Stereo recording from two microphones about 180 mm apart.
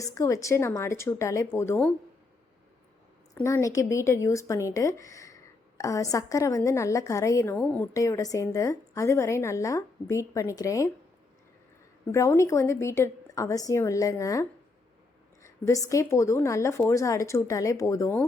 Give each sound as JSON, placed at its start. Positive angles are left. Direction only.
{"t": 0.0, "sound": "speech", "side_deg": 20}
{"t": 3.3, "sound": "speech", "side_deg": 15}
{"t": 7.9, "sound": "speech", "side_deg": 20}
{"t": 12.1, "sound": "speech", "side_deg": 15}
{"t": 15.4, "sound": "a sound", "side_deg": 15}
{"t": 15.9, "sound": "speech", "side_deg": 15}